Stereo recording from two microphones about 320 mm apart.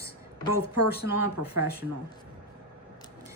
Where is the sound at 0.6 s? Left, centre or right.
Right.